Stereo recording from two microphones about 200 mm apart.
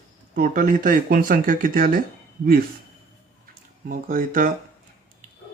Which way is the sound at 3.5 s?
45° right (ahead or behind).